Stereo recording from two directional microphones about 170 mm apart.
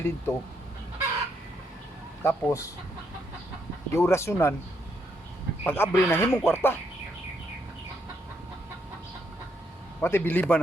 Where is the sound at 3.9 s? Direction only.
15° left (ahead or behind).